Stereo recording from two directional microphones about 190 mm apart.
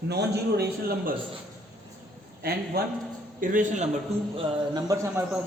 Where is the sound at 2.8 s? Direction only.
55° right (ahead or behind).